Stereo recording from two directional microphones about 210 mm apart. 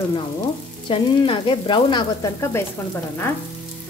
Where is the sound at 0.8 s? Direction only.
25° left (ahead or behind).